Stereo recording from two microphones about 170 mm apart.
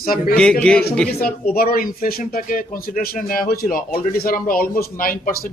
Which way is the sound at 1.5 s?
60° left (ahead or behind).